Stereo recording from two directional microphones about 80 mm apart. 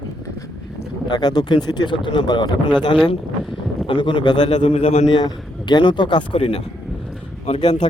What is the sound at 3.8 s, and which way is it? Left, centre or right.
Speech, left.